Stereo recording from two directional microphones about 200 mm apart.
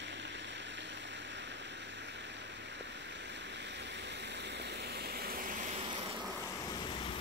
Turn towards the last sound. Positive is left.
turn(degrees=-25)  # may be behind; listen again after turning